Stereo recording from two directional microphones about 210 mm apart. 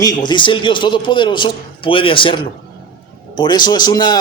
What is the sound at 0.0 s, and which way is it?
A man's voice, 20° left (ahead or behind).